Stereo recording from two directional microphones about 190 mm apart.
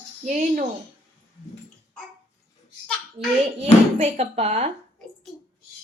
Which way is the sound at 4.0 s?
35° right (ahead or behind).